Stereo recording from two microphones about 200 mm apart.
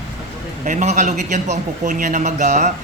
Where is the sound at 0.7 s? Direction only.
40° right (ahead or behind).